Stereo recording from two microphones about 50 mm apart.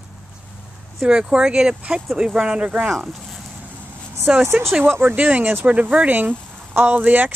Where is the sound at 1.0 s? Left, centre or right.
Centre.